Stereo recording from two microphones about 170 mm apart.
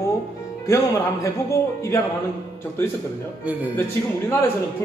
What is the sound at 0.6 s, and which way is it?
A man's voice, 20° left (ahead or behind).